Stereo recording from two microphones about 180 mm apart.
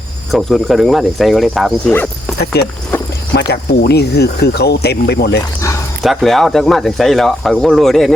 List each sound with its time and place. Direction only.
0.3 s speech: centre (ahead or behind)
1.9 s speech: 10° left (ahead or behind)
2.6 s speech: 65° left (ahead or behind)
5.5 s dog: 15° left (ahead or behind)
6.0 s speech: centre (ahead or behind)